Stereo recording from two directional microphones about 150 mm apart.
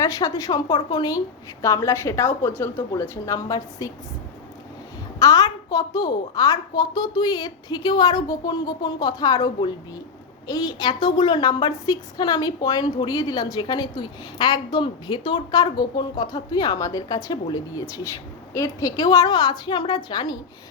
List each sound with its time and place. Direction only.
0.0 s a woman's voice: 20° left (ahead or behind)
5.2 s a woman's voice: 25° left (ahead or behind)